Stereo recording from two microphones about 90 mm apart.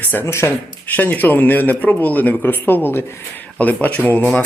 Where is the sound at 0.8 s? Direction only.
20° left (ahead or behind).